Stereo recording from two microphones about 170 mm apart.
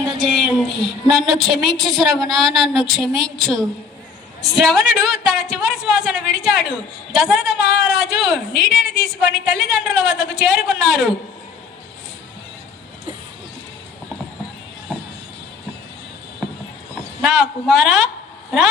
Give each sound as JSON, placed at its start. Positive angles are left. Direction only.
{"t": 0.0, "sound": "a woman's voice", "side_deg": 0}
{"t": 14.9, "sound": "music", "side_deg": 0}
{"t": 17.2, "sound": "a woman's voice", "side_deg": 0}